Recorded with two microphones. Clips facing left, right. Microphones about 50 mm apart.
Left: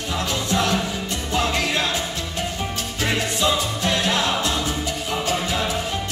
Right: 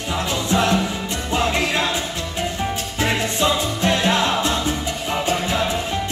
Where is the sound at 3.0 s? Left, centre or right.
Right.